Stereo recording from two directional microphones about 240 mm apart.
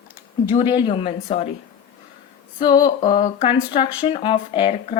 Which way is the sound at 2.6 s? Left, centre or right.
Centre.